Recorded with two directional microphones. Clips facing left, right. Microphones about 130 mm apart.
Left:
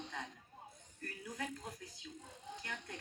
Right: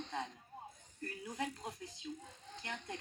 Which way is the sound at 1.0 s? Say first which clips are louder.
Right 3 dB; 25° right (ahead or behind).